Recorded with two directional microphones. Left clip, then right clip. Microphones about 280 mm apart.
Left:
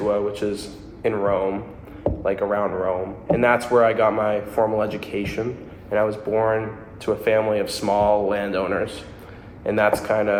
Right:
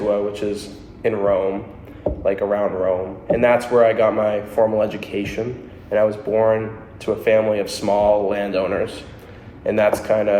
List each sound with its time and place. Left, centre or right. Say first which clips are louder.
0.1 s a man's voice: right 3 dB; centre